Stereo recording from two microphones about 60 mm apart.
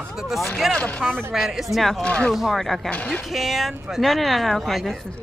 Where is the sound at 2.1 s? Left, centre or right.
Centre.